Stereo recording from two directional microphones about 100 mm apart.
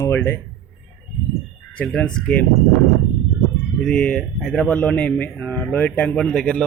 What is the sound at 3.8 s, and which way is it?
Speech, 10° left (ahead or behind).